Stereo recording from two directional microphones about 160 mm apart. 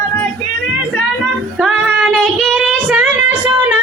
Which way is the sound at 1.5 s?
5° right (ahead or behind).